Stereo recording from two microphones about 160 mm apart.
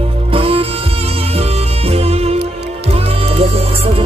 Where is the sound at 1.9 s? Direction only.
40° right (ahead or behind).